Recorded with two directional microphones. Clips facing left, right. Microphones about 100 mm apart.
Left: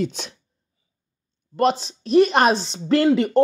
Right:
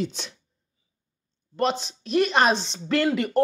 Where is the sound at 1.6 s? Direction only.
40° left (ahead or behind).